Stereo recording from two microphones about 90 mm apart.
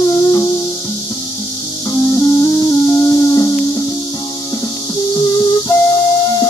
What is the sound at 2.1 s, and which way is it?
Music, 30° left (ahead or behind).